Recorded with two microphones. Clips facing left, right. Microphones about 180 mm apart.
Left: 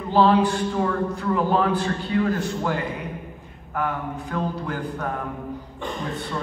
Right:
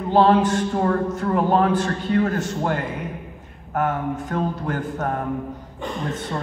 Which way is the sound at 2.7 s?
Centre (ahead or behind).